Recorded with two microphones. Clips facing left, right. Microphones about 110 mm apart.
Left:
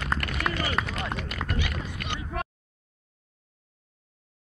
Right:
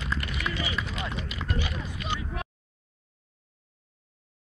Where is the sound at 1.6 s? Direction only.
55° left (ahead or behind).